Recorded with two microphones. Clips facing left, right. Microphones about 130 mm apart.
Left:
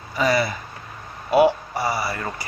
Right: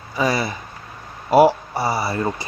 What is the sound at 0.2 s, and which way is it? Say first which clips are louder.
Speech: even; 20° right (ahead or behind).